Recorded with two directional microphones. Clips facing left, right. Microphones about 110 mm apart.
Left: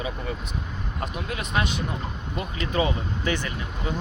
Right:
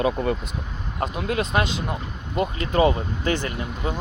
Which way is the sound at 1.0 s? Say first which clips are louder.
Right 7 dB; 35° right (ahead or behind).